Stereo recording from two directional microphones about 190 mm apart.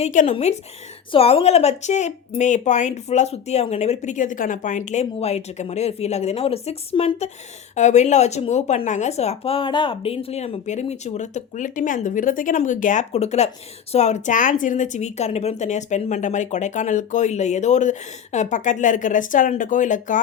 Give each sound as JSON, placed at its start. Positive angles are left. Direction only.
{"t": 0.0, "sound": "a woman's voice", "side_deg": 40}